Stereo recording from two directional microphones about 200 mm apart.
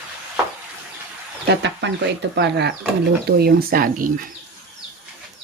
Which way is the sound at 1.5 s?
60° right (ahead or behind).